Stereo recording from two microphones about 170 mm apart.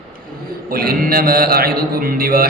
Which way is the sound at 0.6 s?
60° right (ahead or behind).